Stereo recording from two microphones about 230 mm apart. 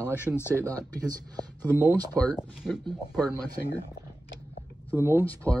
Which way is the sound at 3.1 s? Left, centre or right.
Centre.